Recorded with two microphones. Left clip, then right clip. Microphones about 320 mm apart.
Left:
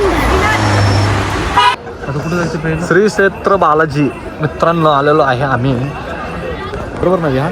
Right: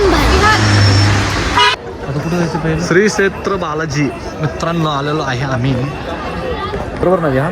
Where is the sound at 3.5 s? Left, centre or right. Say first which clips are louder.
Left 9 dB; left.